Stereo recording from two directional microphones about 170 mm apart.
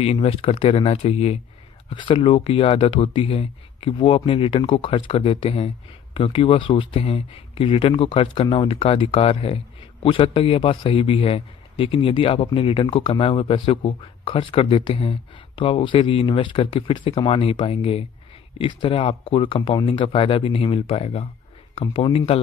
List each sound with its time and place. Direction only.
0.0 s a man's voice: 35° left (ahead or behind)
1.9 s a man's voice: 30° left (ahead or behind)